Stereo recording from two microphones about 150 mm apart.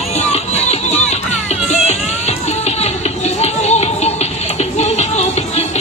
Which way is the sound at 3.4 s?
45° left (ahead or behind).